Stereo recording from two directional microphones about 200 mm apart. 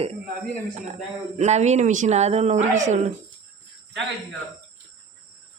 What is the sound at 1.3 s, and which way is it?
Speech, 35° right (ahead or behind).